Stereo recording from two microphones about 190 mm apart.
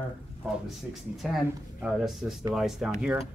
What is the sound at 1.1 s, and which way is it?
Speech, centre (ahead or behind).